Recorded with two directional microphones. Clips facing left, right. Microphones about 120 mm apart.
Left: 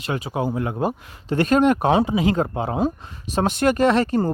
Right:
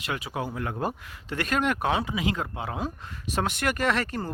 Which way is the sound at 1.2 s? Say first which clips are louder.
Left 10 dB; 30° left (ahead or behind).